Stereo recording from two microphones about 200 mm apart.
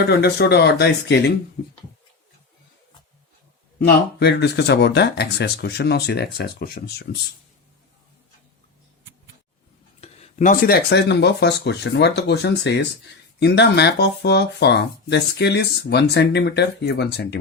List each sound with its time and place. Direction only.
0.0 s speech: 55° left (ahead or behind)
3.8 s speech: 55° left (ahead or behind)
10.0 s speech: 35° left (ahead or behind); by 17.2 s 60° left (ahead or behind)